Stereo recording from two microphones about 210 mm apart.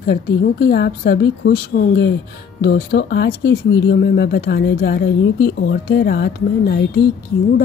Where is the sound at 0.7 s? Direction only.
50° left (ahead or behind).